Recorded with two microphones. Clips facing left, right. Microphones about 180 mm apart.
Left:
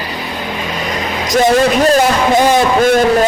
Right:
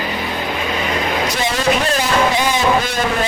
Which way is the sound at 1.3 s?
50° left (ahead or behind).